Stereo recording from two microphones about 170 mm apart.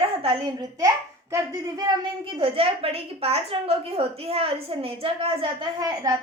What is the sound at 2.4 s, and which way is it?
A woman's voice, 35° right (ahead or behind).